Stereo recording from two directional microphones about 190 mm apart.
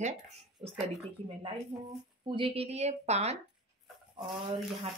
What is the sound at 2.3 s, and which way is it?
A woman's voice, 30° right (ahead or behind).